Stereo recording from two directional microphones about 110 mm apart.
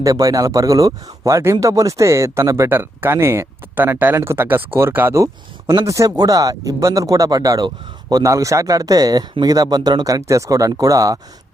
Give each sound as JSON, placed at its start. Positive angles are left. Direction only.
{"t": 0.0, "sound": "speech", "side_deg": -30}